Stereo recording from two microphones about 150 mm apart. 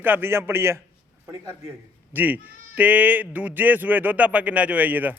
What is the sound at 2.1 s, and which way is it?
A man's voice, 10° right (ahead or behind).